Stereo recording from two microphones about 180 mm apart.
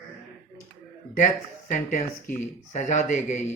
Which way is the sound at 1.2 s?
45° left (ahead or behind).